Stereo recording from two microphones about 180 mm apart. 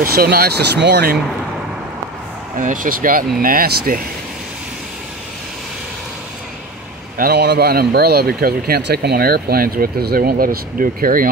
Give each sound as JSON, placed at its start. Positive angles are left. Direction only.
{"t": 0.0, "sound": "speech", "side_deg": -55}
{"t": 2.5, "sound": "speech", "side_deg": -45}
{"t": 7.2, "sound": "speech", "side_deg": -60}